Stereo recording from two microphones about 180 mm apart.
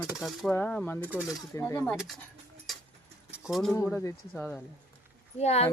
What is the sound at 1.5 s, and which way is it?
Speech, 15° left (ahead or behind).